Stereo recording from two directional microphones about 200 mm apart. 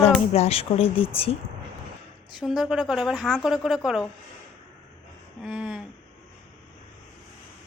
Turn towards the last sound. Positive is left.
turn(degrees=-5)  # may be behind; listen again after turning